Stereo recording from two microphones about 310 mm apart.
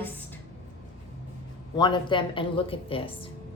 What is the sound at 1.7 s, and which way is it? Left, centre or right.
Speech, centre.